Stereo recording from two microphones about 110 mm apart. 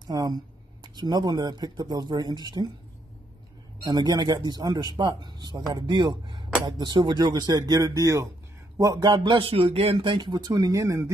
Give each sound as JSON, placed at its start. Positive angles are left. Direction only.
{"t": 0.0, "sound": "speech", "side_deg": -35}
{"t": 3.8, "sound": "speech", "side_deg": -40}